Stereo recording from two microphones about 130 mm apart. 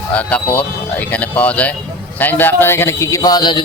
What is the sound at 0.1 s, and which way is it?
A man's voice, 10° left (ahead or behind).